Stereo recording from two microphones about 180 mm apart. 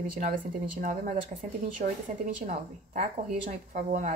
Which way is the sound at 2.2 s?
45° right (ahead or behind).